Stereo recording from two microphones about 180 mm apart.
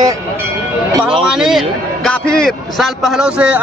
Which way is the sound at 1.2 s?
5° right (ahead or behind).